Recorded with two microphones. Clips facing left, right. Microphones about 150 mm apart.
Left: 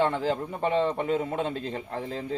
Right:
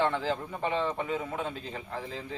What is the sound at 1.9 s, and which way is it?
Speech, 50° left (ahead or behind).